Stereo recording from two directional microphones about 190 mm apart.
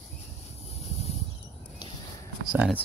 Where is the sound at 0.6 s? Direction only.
30° left (ahead or behind).